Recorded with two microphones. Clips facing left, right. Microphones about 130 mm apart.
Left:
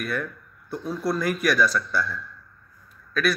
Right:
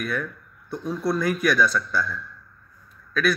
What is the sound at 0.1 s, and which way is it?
Speech, 5° left (ahead or behind).